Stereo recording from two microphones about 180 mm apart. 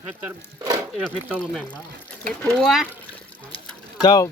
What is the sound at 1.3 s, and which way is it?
Speech, 5° left (ahead or behind).